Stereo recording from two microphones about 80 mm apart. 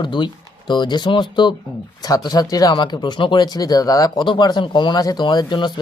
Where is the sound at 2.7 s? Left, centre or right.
Left.